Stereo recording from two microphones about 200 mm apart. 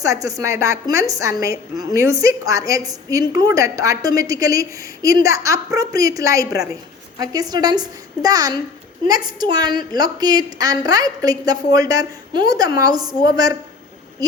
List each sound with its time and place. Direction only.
0.0 s a woman's voice: 15° right (ahead or behind)